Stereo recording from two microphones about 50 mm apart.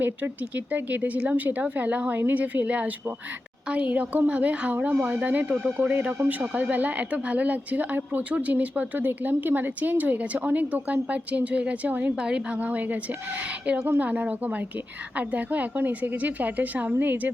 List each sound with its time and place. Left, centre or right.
0.0 s a woman's voice: right; by 12.5 s centre
12.5 s a woman's voice: right